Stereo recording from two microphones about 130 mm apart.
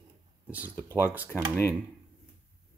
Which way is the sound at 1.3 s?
15° left (ahead or behind).